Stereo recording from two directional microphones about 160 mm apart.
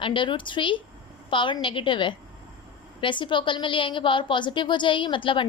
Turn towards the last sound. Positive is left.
turn(degrees=30)  # may be behind; listen again after turning